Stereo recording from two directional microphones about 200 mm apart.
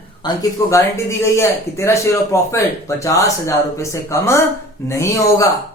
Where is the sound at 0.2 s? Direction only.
20° left (ahead or behind).